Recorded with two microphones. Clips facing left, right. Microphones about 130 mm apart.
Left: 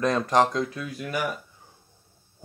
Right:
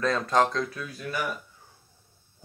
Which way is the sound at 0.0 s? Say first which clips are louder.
Left 2 dB; 20° left (ahead or behind).